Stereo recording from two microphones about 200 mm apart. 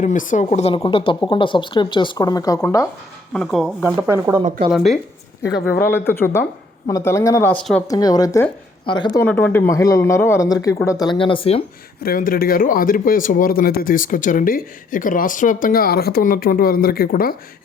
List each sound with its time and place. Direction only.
0.0 s a woman's voice: 40° left (ahead or behind); by 2.8 s 15° left (ahead or behind)
3.3 s speech: centre (ahead or behind)
3.8 s speech: 15° right (ahead or behind)
4.7 s speech: centre (ahead or behind)
5.5 s speech: 55° left (ahead or behind)
5.8 s speech: 10° left (ahead or behind)
7.9 s speech: 20° left (ahead or behind)
9.2 s speech: 10° left (ahead or behind); by 11.6 s 30° left (ahead or behind)
12.0 s speech: 45° left (ahead or behind)